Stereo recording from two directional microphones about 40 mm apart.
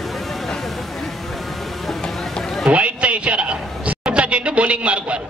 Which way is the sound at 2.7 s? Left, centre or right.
Right.